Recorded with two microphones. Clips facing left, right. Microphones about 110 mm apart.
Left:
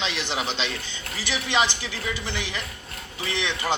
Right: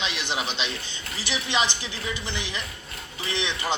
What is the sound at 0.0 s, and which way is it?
A man's voice, 15° right (ahead or behind).